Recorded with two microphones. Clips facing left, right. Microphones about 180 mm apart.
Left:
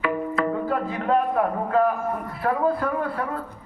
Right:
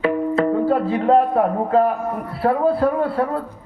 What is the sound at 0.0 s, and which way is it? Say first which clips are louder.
Music: right 6 dB; 30° right (ahead or behind).